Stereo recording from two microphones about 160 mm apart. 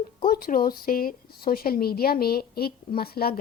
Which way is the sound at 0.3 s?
65° left (ahead or behind).